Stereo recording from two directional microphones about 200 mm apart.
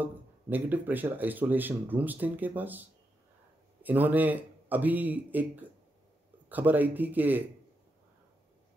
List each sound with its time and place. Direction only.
0.0 s speech: 10° right (ahead or behind)